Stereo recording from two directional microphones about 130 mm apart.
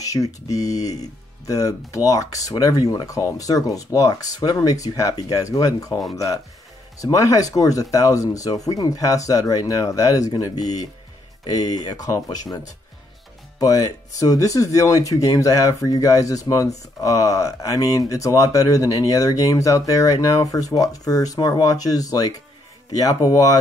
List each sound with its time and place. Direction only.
0.0 s speech: 25° left (ahead or behind)
13.6 s speech: 30° left (ahead or behind)